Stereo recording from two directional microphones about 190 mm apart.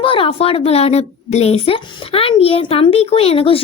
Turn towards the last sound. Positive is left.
turn(degrees=30)  # may be behind; listen again after turning